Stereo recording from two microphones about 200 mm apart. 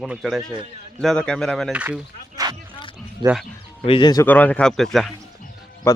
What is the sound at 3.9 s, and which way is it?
Speech, 25° left (ahead or behind).